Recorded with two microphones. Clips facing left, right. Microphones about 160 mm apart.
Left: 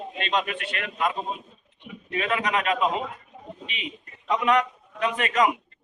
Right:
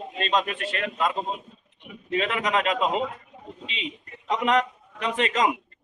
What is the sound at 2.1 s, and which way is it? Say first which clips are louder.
Speech: right 1 dB; 25° right (ahead or behind).